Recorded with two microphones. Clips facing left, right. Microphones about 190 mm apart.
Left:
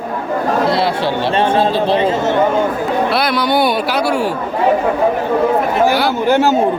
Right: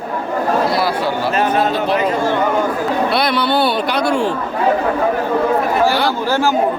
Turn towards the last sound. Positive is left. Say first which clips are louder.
# left 4 dB
turn(degrees=20)  # may be behind; listen again after turning